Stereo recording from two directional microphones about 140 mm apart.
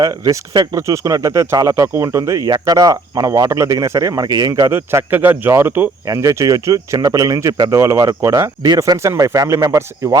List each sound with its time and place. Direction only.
0.0 s speech: 25° right (ahead or behind)